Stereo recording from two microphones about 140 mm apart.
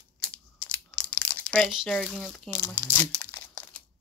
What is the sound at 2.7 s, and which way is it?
Speech, 15° left (ahead or behind).